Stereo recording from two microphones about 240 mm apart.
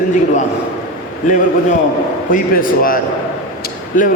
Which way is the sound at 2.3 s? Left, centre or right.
Left.